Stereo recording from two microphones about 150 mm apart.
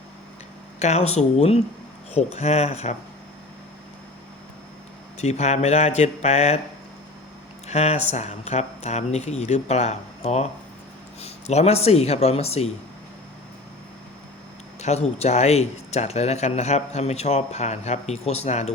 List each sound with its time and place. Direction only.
0.8 s speech: 45° left (ahead or behind)
5.1 s speech: 45° left (ahead or behind)
7.7 s speech: 45° left (ahead or behind)
14.8 s speech: 45° left (ahead or behind)